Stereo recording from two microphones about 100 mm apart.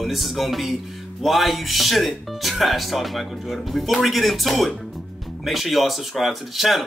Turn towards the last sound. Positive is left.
turn(degrees=0)  # may be behind; listen again after turning